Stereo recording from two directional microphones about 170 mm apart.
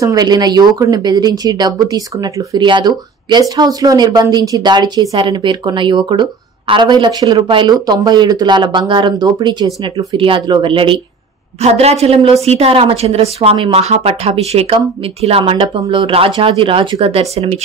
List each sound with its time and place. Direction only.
0.0 s a woman's voice: 20° right (ahead or behind); by 17.6 s 40° right (ahead or behind)